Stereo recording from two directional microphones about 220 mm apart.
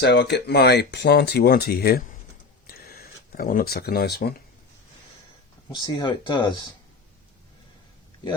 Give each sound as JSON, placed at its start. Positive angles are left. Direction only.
{"t": 0.0, "sound": "speech", "side_deg": 50}
{"t": 2.6, "sound": "a sound", "side_deg": 45}
{"t": 5.7, "sound": "speech", "side_deg": 20}